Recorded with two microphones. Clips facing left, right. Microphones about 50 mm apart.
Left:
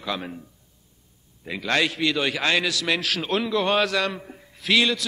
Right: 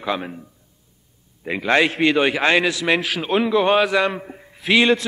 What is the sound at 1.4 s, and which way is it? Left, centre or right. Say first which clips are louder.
A man's voice: right 6 dB; right.